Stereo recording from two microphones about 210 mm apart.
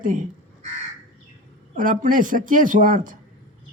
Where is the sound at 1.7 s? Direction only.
40° right (ahead or behind).